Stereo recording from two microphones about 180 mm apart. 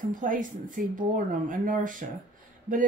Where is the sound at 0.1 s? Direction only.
50° right (ahead or behind).